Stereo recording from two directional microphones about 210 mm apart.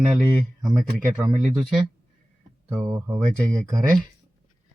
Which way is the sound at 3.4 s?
5° left (ahead or behind).